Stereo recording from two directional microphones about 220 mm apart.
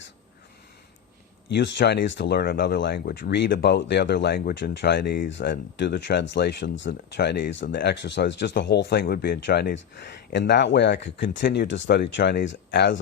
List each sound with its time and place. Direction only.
1.5 s speech: 50° left (ahead or behind)